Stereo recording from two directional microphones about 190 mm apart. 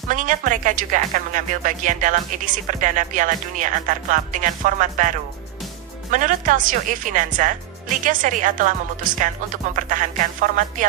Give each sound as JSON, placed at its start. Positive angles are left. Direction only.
{"t": 0.1, "sound": "speech", "side_deg": -45}